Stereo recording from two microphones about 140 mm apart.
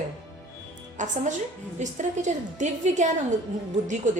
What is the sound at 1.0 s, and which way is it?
A woman's voice, 60° right (ahead or behind).